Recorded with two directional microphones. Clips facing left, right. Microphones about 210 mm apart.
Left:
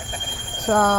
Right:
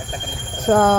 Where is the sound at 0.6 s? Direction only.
25° right (ahead or behind).